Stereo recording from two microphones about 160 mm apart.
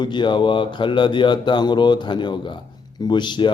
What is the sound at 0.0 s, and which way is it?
A man's voice, 30° left (ahead or behind).